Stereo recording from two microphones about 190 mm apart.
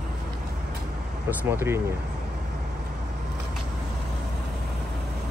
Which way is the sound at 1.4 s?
10° right (ahead or behind).